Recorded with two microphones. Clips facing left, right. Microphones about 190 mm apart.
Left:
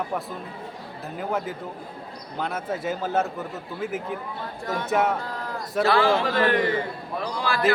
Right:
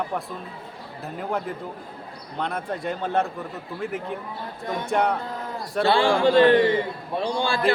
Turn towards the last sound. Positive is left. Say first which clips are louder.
# right 1 dB
turn(degrees=-30)  # may be behind; listen again after turning